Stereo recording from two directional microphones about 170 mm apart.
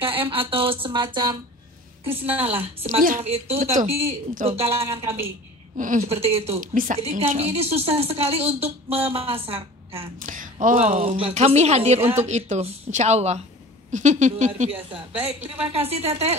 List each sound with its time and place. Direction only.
0.0 s a woman's voice: 30° right (ahead or behind)
2.4 s a woman's voice: 35° right (ahead or behind)
5.8 s speech: 50° right (ahead or behind)
6.0 s a woman's voice: 35° right (ahead or behind)
7.0 s a woman's voice: 40° right (ahead or behind)
10.1 s a woman's voice: 50° right (ahead or behind)
15.0 s a woman's voice: 10° right (ahead or behind)
15.4 s a woman's voice: 35° right (ahead or behind)